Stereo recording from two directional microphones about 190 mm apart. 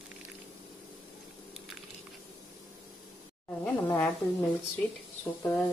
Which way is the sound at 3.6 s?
15° left (ahead or behind).